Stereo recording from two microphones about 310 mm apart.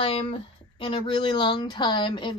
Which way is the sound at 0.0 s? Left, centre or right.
Centre.